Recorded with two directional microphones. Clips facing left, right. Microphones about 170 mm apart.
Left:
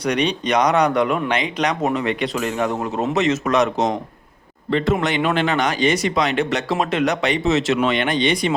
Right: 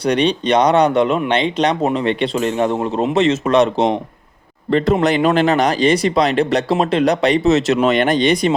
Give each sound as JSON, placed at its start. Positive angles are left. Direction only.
{"t": 0.0, "sound": "speech", "side_deg": -30}